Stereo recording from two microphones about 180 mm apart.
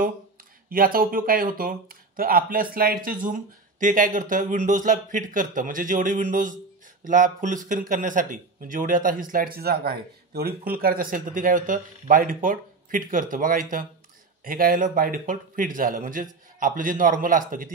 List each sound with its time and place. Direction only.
0.7 s speech: 50° right (ahead or behind)